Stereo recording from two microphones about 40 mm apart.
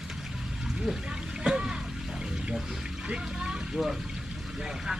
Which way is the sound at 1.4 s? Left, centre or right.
Centre.